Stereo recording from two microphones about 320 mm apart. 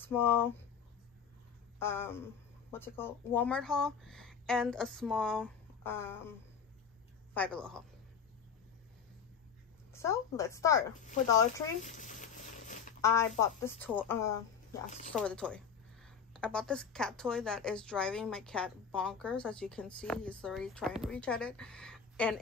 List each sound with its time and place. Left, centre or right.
0.0 s speech: centre
1.8 s a woman's voice: centre
7.3 s a woman's voice: centre
9.9 s speech: centre
11.8 s a sound: left
13.0 s a woman's voice: centre